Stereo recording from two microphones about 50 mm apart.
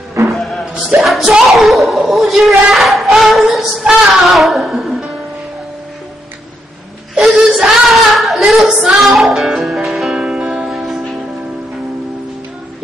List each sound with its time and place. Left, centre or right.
0.3 s music: centre
1.5 s a sound: centre
3.9 s a woman's voice: centre
7.2 s a sound: centre
8.8 s music: centre
10.1 s music: centre
10.7 s music: centre